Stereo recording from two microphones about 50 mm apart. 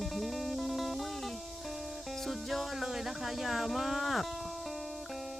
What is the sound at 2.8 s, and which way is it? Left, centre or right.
Speech, centre.